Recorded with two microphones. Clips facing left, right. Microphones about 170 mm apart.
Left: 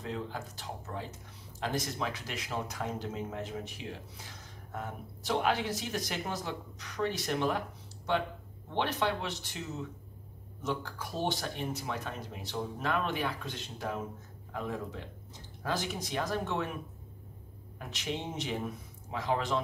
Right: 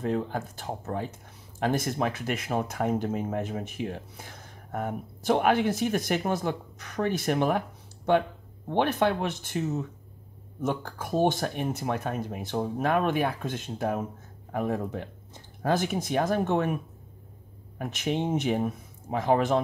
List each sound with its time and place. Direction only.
0.0 s speech: 55° right (ahead or behind)
17.7 s speech: 55° right (ahead or behind)